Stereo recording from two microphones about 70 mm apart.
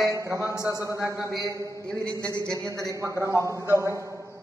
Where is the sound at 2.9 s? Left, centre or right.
Right.